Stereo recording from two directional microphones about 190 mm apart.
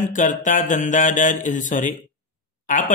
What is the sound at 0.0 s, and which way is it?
Speech, 40° left (ahead or behind).